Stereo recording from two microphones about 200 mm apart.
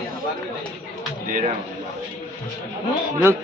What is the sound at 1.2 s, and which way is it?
Speech, 40° right (ahead or behind).